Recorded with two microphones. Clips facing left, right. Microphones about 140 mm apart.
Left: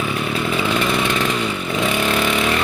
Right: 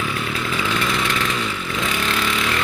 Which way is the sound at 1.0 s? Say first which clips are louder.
Left 4 dB; 25° left (ahead or behind).